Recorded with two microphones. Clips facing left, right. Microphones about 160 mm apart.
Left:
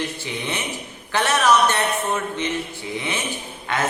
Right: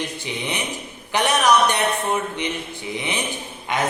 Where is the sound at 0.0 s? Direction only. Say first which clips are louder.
Even; 15° right (ahead or behind).